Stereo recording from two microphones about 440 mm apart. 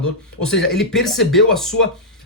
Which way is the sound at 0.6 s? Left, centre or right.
Centre.